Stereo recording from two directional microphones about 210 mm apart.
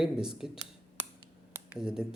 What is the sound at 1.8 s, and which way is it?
Speech, 5° right (ahead or behind).